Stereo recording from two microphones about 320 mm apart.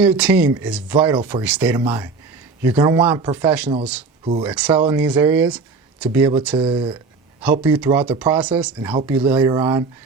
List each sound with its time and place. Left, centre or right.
0.0 s speech: centre
6.6 s speech: centre
7.4 s speech: centre